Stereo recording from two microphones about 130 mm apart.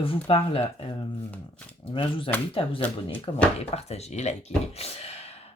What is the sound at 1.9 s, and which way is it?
Speech, 40° left (ahead or behind).